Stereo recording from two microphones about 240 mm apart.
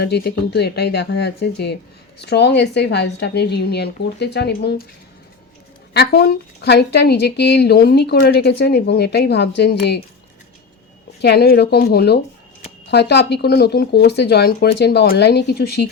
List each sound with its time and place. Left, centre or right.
0.0 s speech: left
5.9 s speech: left
11.2 s speech: left